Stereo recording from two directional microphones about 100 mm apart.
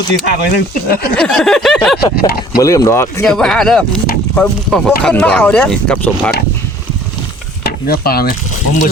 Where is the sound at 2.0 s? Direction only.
35° left (ahead or behind).